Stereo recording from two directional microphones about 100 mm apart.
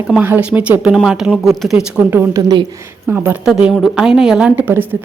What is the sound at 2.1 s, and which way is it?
A woman's voice, 25° right (ahead or behind).